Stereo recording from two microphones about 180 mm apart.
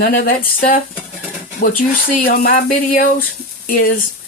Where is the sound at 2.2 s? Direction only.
50° left (ahead or behind).